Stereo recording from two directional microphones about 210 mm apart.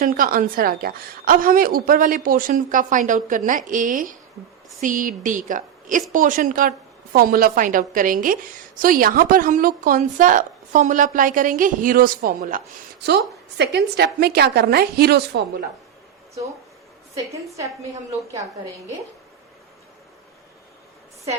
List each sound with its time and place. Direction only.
0.0 s a woman's voice: 40° right (ahead or behind)
13.1 s a woman's voice: 50° right (ahead or behind)